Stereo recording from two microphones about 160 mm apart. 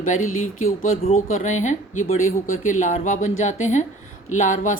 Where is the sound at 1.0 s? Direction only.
50° left (ahead or behind).